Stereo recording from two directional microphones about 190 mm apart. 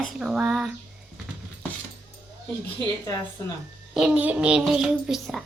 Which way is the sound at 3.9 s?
5° right (ahead or behind).